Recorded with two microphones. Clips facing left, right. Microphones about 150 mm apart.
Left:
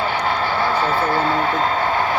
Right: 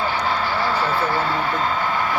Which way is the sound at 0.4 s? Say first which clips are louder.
Left 2 dB; 55° left (ahead or behind).